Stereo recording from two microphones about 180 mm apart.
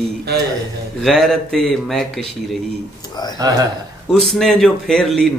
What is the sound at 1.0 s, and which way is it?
Speech, centre (ahead or behind).